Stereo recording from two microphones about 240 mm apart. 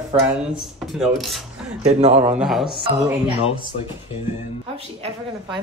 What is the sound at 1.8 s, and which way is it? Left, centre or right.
Speech, right.